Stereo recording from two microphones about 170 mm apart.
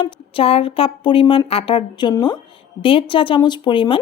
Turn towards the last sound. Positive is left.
turn(degrees=30)  # may be behind; listen again after turning